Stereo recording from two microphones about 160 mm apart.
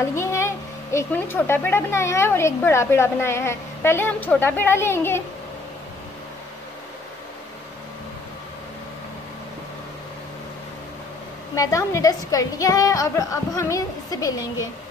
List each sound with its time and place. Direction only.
0.0 s a sound: 15° left (ahead or behind)
0.9 s a woman's voice: 15° left (ahead or behind)
11.5 s a woman's voice: 20° left (ahead or behind)